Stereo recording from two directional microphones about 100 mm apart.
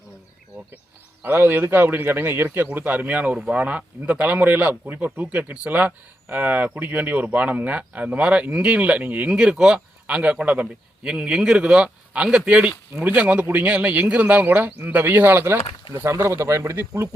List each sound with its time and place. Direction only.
1.2 s a man's voice: 20° right (ahead or behind)